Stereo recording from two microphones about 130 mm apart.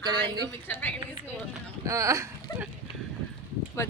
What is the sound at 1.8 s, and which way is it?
Speech, 25° right (ahead or behind).